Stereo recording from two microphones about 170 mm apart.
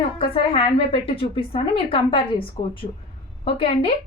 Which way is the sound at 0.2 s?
30° left (ahead or behind).